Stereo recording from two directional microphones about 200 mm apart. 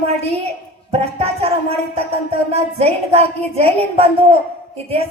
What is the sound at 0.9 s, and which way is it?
A woman's voice, 30° right (ahead or behind).